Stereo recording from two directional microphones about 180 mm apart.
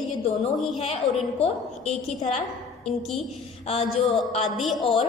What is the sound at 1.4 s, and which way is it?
A woman's voice, 35° left (ahead or behind).